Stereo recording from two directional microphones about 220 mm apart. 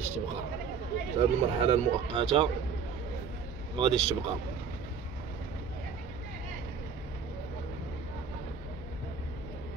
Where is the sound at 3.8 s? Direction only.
25° right (ahead or behind).